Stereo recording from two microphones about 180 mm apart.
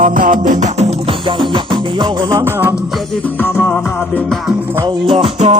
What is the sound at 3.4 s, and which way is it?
Music, 10° left (ahead or behind).